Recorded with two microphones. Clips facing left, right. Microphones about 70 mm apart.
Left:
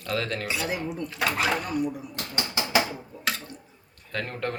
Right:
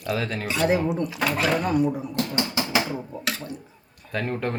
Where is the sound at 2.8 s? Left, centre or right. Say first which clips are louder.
Left 2 dB; centre.